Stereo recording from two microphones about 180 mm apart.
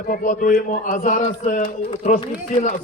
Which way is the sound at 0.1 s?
50° left (ahead or behind).